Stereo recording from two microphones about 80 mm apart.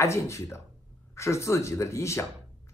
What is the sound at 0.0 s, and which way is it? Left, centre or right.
Speech, left.